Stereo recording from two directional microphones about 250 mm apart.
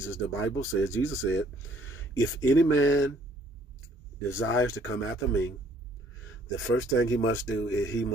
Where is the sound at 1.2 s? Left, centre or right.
Left.